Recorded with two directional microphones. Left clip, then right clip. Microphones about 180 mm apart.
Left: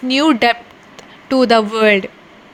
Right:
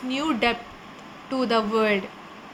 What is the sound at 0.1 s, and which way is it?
A woman's voice, 50° left (ahead or behind).